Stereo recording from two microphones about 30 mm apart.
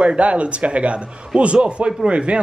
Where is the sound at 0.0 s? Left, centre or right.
Right.